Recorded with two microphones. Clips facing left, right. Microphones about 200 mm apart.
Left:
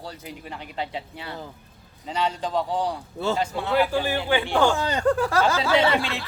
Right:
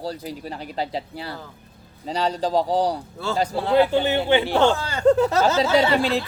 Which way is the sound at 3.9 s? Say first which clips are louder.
Right 4 dB; 25° right (ahead or behind).